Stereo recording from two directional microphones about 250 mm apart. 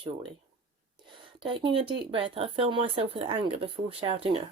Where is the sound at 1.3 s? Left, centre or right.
Centre.